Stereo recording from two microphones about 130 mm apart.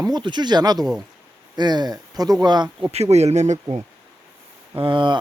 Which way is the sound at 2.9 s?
55° right (ahead or behind).